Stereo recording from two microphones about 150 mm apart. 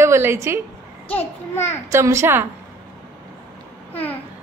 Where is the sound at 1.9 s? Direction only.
20° right (ahead or behind).